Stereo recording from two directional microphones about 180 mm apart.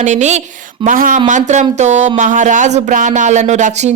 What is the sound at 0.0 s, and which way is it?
Speech, 40° right (ahead or behind).